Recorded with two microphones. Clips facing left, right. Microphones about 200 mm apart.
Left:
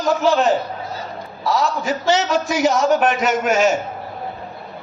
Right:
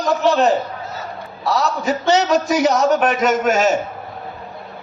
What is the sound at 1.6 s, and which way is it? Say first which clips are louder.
A man's voice: right 2 dB; 40° right (ahead or behind).